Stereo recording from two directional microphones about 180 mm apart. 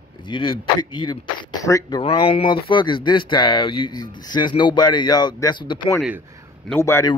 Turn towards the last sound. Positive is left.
turn(degrees=15)  # may be behind; listen again after turning